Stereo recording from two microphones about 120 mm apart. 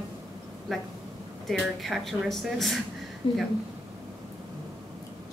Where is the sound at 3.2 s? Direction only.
40° left (ahead or behind).